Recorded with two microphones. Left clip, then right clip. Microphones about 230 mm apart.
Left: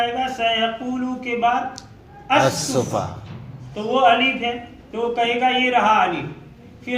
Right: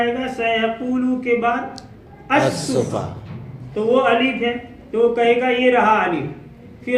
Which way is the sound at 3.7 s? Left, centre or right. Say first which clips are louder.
Even; left.